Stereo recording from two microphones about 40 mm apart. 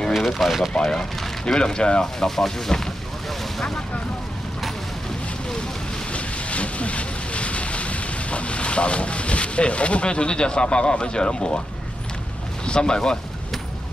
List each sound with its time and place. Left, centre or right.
0.1 s speech: centre
1.4 s speech: centre
2.1 s a sound: centre
6.1 s speech: left
12.6 s speech: left